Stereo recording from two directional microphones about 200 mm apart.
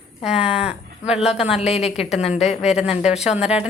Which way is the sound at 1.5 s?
30° left (ahead or behind).